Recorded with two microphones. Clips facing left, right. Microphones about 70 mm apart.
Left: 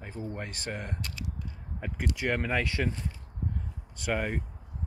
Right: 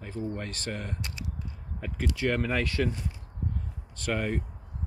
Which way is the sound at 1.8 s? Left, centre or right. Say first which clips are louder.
Right 2 dB; centre.